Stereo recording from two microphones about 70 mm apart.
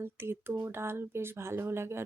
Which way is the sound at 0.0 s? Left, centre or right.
Right.